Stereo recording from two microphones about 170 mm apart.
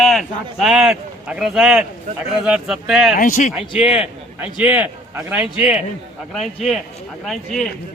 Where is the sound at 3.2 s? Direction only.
50° left (ahead or behind).